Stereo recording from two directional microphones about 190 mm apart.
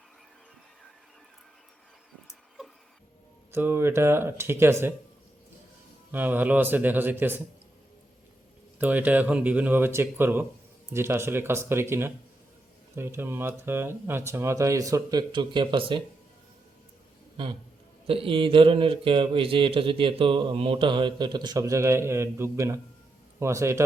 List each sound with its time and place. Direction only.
3.5 s speech: 10° right (ahead or behind)
6.1 s speech: 10° right (ahead or behind)
8.8 s speech: 10° right (ahead or behind); by 16.0 s 25° right (ahead or behind)
18.0 s speech: 30° right (ahead or behind)